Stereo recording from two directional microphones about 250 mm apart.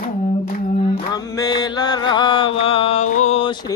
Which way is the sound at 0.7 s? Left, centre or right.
Centre.